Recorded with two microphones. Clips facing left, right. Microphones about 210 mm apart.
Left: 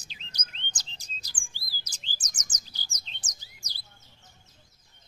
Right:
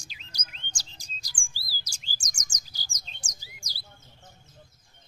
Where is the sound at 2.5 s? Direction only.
10° right (ahead or behind).